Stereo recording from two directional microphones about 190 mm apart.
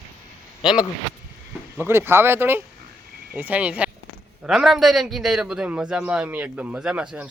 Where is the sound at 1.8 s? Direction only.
10° right (ahead or behind).